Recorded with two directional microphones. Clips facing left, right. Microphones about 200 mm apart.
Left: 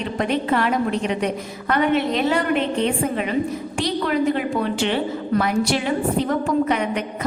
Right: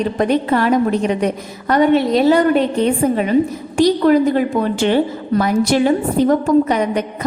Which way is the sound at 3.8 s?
40° right (ahead or behind).